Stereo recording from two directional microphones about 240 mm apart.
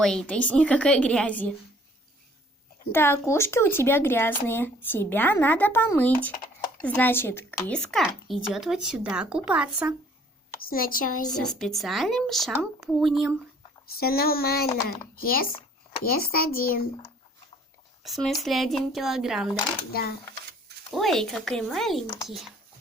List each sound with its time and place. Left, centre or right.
0.0 s speech: centre
2.9 s speech: centre
10.7 s speech: left
11.3 s speech: centre
13.8 s speech: left
18.0 s speech: centre
19.9 s speech: left
20.9 s speech: centre